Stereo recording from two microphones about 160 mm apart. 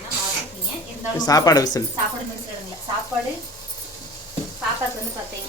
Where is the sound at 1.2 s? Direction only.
25° left (ahead or behind).